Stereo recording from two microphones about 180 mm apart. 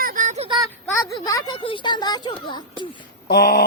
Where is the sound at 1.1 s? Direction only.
20° left (ahead or behind).